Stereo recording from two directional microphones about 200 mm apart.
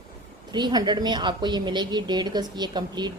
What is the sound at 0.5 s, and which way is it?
A woman's voice, 20° right (ahead or behind).